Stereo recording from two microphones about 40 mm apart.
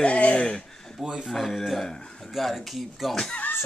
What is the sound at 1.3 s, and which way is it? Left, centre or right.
Speech, centre.